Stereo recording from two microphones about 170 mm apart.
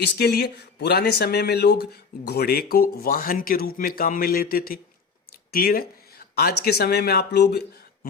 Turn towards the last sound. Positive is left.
turn(degrees=70)  # may be behind; listen again after turning